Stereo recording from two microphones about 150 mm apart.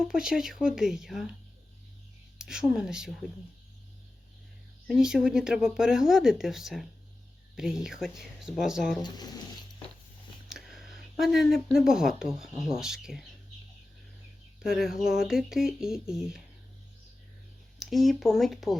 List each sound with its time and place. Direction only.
0.0 s speech: 5° right (ahead or behind)
2.4 s speech: 5° right (ahead or behind)
4.9 s speech: 5° right (ahead or behind)
9.0 s music: 30° left (ahead or behind)
10.5 s speech: centre (ahead or behind)
14.6 s speech: 5° right (ahead or behind)
17.7 s speech: centre (ahead or behind)